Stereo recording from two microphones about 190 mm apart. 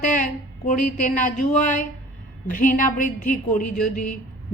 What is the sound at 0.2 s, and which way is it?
A woman's voice, 45° left (ahead or behind).